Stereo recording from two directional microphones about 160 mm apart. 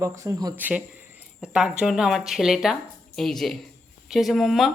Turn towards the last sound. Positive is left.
turn(degrees=0)  # may be behind; listen again after turning